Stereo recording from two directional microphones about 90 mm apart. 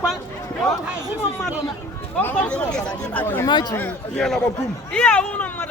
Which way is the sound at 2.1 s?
15° left (ahead or behind).